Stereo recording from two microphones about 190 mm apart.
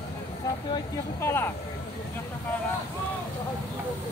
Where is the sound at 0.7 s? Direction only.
15° left (ahead or behind).